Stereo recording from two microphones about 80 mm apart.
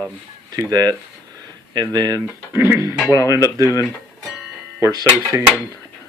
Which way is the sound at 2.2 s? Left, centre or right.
Right.